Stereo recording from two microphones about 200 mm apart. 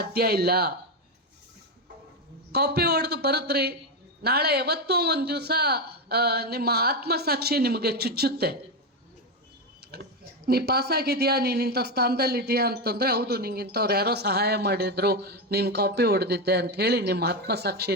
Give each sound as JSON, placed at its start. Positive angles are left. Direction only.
{"t": 0.0, "sound": "speech", "side_deg": -50}
{"t": 2.5, "sound": "speech", "side_deg": -50}
{"t": 9.9, "sound": "speech", "side_deg": -50}